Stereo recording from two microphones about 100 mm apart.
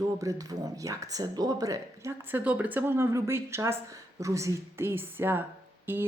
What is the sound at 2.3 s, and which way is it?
A woman's voice, 15° right (ahead or behind).